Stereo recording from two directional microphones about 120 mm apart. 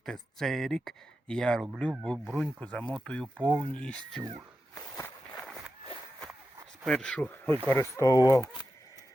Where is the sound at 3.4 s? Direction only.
40° right (ahead or behind).